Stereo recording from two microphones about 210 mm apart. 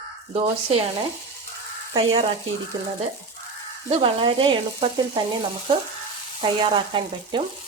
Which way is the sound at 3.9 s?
25° right (ahead or behind).